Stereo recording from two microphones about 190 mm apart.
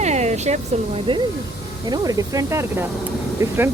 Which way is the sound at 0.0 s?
35° right (ahead or behind).